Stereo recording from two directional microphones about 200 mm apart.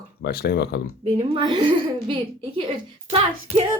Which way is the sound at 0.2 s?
50° left (ahead or behind).